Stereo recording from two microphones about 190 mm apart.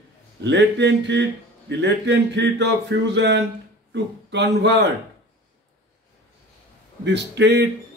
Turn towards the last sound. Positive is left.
turn(degrees=-65)  # may be behind; listen again after turning